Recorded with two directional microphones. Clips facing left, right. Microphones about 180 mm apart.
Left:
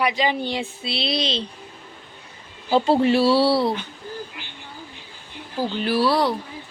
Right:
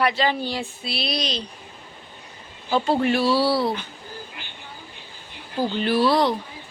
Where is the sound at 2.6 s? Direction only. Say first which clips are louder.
Left 3 dB; 30° left (ahead or behind).